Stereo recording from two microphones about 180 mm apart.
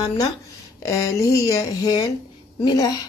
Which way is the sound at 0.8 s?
20° left (ahead or behind).